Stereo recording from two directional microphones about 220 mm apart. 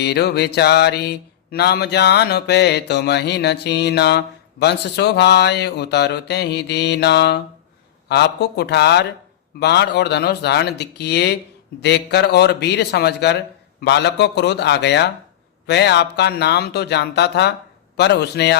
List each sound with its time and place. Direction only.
0.0 s mantra: 50° left (ahead or behind)